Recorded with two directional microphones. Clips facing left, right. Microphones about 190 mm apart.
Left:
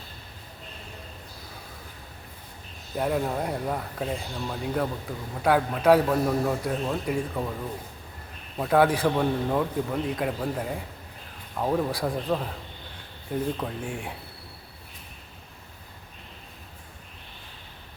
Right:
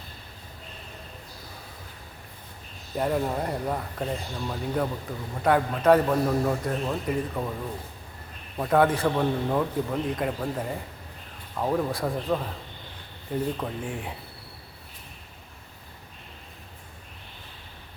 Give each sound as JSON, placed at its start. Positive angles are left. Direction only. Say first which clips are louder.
{"t": 2.9, "sound": "speech", "louder": "even", "side_deg": 0}
{"t": 8.5, "sound": "speech", "louder": "even", "side_deg": 5}